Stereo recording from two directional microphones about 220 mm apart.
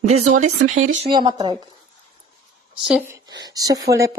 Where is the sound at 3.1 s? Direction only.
15° right (ahead or behind).